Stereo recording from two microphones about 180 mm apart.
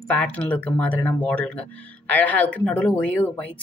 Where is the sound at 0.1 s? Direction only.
10° left (ahead or behind).